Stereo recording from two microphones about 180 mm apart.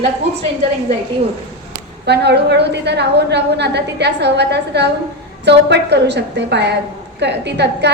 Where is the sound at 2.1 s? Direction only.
70° right (ahead or behind).